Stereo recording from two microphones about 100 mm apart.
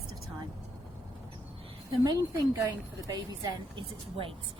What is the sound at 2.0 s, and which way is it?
A woman's voice, 35° right (ahead or behind).